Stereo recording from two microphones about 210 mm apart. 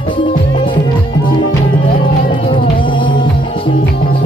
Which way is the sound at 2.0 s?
25° left (ahead or behind).